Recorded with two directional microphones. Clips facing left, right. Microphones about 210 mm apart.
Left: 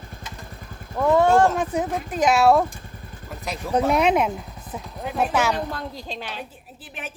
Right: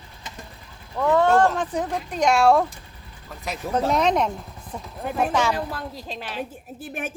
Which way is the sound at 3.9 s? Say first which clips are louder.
Left 1 dB; 10° left (ahead or behind).